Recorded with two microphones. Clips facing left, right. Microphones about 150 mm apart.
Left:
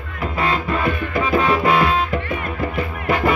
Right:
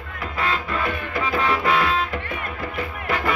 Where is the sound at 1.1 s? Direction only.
15° left (ahead or behind).